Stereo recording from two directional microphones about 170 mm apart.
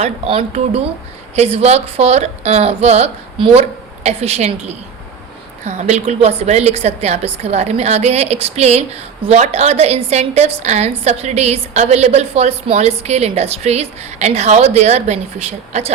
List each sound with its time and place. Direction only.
0.0 s a woman's voice: 35° right (ahead or behind)